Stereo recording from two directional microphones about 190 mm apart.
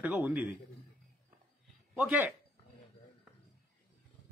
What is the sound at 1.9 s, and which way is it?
Speech, 10° right (ahead or behind).